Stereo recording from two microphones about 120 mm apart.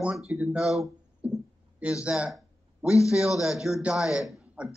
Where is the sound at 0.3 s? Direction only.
10° right (ahead or behind).